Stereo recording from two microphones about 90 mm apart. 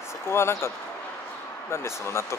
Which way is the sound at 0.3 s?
30° left (ahead or behind).